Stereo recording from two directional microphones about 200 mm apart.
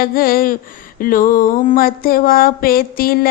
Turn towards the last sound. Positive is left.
turn(degrees=45)  # may be behind; listen again after turning